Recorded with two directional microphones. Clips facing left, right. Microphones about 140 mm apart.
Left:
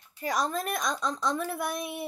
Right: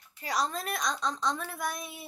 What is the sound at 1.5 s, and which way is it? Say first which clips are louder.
Speech: left 4 dB; 60° left (ahead or behind).